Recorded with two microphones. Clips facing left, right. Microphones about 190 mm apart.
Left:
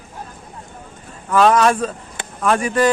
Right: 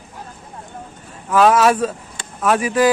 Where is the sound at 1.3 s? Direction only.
5° right (ahead or behind).